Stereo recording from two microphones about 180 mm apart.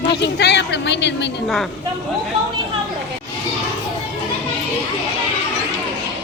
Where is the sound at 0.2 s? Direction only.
70° left (ahead or behind).